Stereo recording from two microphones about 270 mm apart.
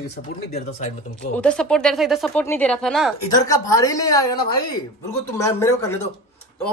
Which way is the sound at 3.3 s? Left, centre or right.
Centre.